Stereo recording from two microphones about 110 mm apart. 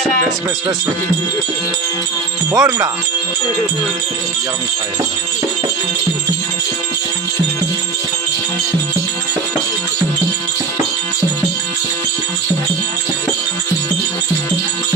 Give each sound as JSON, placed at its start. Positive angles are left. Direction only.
{"t": 2.5, "sound": "speech", "side_deg": -35}